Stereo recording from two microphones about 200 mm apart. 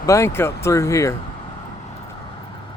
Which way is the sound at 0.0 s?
15° left (ahead or behind).